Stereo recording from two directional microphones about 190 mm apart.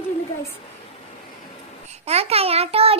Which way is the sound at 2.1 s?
30° right (ahead or behind).